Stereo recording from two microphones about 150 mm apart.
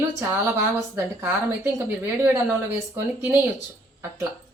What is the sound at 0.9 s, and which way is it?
Speech, 20° right (ahead or behind).